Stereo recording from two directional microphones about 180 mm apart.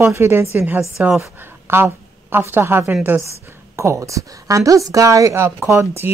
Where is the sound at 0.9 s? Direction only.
Centre (ahead or behind).